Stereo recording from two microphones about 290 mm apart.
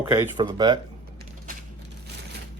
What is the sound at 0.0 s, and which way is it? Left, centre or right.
Speech, centre.